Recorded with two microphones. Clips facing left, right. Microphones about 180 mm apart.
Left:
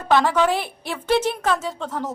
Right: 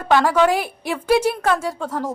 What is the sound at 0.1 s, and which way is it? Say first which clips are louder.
A woman's voice: right 2 dB; 10° right (ahead or behind).